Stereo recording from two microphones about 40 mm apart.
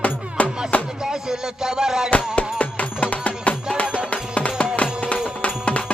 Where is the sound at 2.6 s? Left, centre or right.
Left.